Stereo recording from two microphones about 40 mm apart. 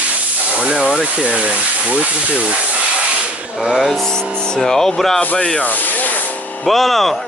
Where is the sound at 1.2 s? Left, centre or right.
Right.